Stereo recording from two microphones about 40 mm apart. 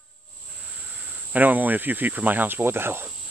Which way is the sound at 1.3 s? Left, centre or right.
Right.